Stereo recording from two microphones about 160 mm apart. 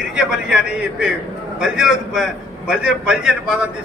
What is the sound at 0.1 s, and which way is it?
A man's voice, 5° right (ahead or behind).